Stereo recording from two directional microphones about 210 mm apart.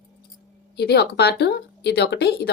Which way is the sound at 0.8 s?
50° left (ahead or behind).